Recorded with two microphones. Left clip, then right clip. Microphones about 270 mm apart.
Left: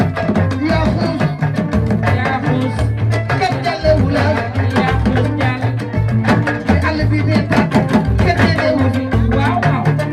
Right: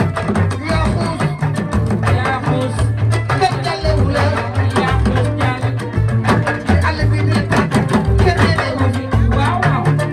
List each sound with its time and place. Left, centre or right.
3.4 s music: right